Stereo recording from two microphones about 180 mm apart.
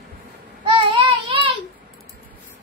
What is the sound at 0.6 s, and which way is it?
Child singing, 30° right (ahead or behind).